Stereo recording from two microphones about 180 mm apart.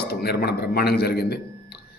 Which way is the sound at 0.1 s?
60° left (ahead or behind).